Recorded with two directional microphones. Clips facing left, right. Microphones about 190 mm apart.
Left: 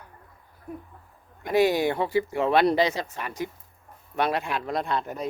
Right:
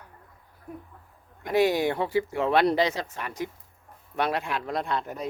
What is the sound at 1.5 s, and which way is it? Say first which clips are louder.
Speech: left 1 dB; 10° left (ahead or behind).